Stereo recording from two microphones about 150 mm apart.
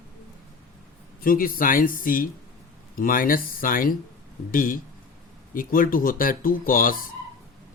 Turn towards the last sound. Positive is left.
turn(degrees=70)  # may be behind; listen again after turning